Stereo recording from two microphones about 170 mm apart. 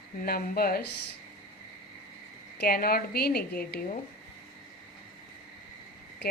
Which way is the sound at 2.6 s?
65° left (ahead or behind).